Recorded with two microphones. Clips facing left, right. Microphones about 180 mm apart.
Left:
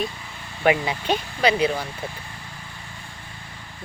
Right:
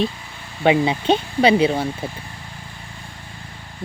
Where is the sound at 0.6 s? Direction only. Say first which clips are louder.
Right 4 dB; 25° right (ahead or behind).